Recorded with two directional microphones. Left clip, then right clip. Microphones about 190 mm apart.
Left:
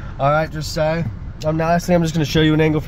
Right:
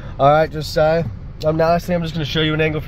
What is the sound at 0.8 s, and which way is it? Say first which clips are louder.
Speech: right 4 dB; 35° right (ahead or behind).